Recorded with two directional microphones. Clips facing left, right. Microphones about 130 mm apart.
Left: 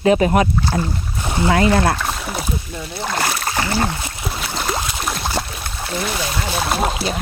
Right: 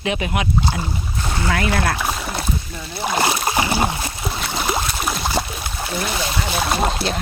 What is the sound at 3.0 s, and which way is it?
Speech, 10° right (ahead or behind).